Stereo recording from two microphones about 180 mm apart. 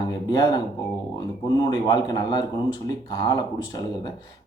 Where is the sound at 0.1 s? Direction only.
20° left (ahead or behind).